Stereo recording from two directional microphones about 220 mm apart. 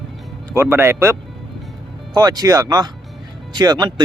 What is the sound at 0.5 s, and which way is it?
Speech, 10° right (ahead or behind).